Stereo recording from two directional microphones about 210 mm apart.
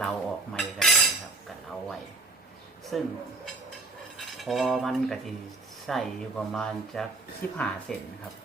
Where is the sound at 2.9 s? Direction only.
Centre (ahead or behind).